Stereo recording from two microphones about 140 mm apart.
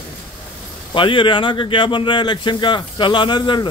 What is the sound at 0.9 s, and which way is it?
Speech, 35° left (ahead or behind).